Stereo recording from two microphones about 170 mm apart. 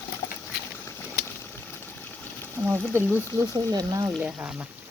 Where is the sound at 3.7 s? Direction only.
20° right (ahead or behind).